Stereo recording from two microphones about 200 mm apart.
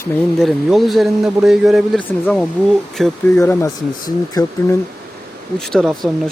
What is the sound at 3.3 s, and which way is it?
Speech, 15° left (ahead or behind).